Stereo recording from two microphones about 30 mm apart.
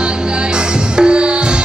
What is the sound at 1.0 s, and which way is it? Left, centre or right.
Music, right.